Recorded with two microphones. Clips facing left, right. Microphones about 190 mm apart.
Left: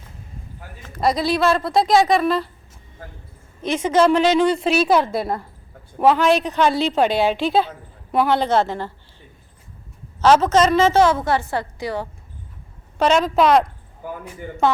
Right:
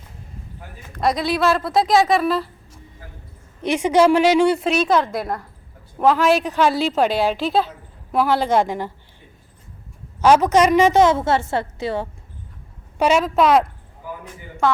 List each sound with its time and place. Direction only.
0.9 s a woman's voice: centre (ahead or behind)
3.6 s a woman's voice: 15° right (ahead or behind)
8.4 s a woman's voice: 10° right (ahead or behind)
10.2 s a woman's voice: 15° right (ahead or behind)
13.0 s a woman's voice: 10° right (ahead or behind)